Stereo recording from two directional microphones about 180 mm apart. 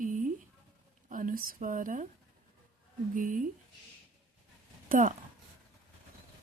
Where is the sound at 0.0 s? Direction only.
45° right (ahead or behind).